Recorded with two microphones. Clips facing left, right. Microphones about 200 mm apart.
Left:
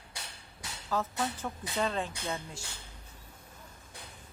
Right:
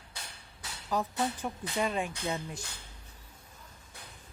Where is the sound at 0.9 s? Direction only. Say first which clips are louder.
Right 1 dB; 15° right (ahead or behind).